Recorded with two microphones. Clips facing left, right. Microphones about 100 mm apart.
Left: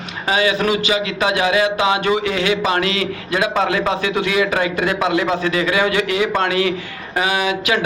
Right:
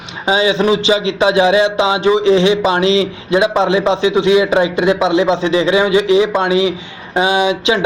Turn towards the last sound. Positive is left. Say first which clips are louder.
# right 5 dB
turn(degrees=-25)  # may be behind; listen again after turning